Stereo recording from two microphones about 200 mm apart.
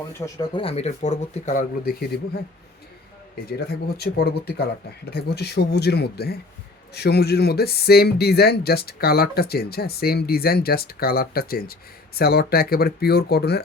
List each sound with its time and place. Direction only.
0.2 s speech: 15° left (ahead or behind)
0.5 s speech: 30° left (ahead or behind); by 2.4 s 50° left (ahead or behind)
3.9 s speech: 55° left (ahead or behind)